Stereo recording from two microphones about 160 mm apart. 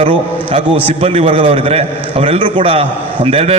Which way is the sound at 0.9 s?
35° right (ahead or behind).